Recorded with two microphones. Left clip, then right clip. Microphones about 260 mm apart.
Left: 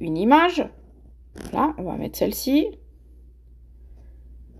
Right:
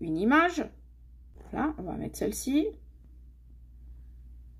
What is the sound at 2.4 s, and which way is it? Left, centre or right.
Speech, left.